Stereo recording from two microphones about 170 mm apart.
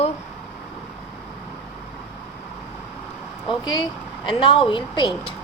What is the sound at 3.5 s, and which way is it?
A woman's voice, 25° left (ahead or behind).